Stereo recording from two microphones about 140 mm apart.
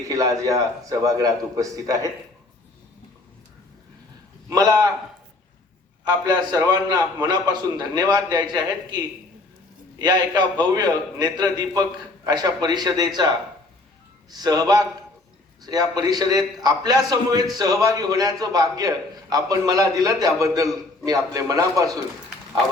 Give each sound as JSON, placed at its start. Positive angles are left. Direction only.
{"t": 0.0, "sound": "a man's voice", "side_deg": -25}
{"t": 4.4, "sound": "a man's voice", "side_deg": -25}
{"t": 6.1, "sound": "a man's voice", "side_deg": -25}